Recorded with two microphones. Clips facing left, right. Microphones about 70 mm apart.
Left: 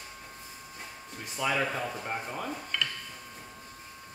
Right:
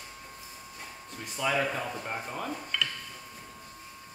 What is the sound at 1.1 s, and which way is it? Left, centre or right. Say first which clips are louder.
Speech: right 1 dB; centre.